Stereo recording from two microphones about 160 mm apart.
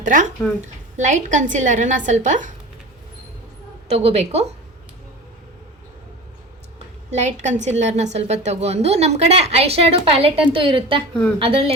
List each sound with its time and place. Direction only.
0.0 s a woman's voice: 50° right (ahead or behind)
3.8 s a woman's voice: 40° right (ahead or behind)
7.1 s a woman's voice: 45° right (ahead or behind)